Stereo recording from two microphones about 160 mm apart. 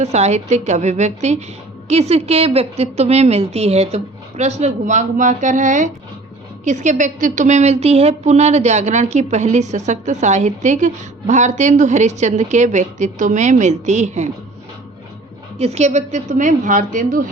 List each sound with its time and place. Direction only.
0.0 s a woman's voice: 45° right (ahead or behind)
15.5 s speech: 40° right (ahead or behind)